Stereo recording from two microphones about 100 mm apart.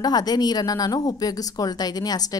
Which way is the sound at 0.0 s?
40° left (ahead or behind).